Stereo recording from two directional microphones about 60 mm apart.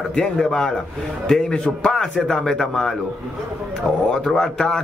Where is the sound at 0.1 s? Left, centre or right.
Centre.